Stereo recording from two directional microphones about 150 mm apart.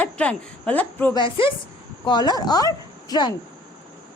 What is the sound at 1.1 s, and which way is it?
A woman's voice, 35° left (ahead or behind).